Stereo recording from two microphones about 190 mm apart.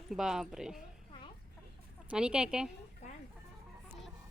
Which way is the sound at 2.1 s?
5° right (ahead or behind).